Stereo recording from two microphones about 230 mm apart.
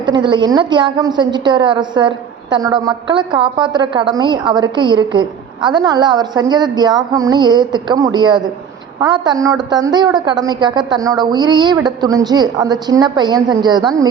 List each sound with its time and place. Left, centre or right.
0.0 s a woman's voice: centre